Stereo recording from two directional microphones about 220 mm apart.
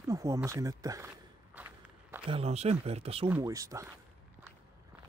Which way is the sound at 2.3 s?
30° right (ahead or behind).